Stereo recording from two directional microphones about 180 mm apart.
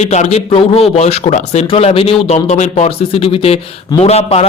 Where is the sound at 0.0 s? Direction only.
40° left (ahead or behind).